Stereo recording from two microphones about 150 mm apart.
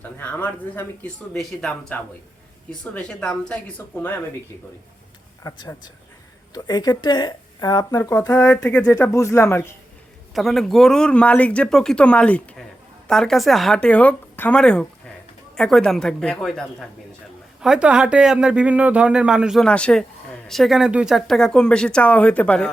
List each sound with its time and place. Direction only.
0.0 s speech: 10° left (ahead or behind)
5.4 s speech: 20° left (ahead or behind)
8.4 s speech: 10° left (ahead or behind)
8.8 s speech: 20° left (ahead or behind)
10.3 s speech: centre (ahead or behind)